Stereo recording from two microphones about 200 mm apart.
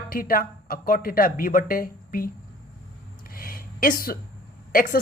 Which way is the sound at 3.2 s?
45° left (ahead or behind).